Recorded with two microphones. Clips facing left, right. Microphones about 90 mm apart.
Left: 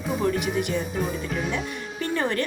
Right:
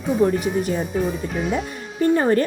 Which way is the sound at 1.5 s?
40° right (ahead or behind).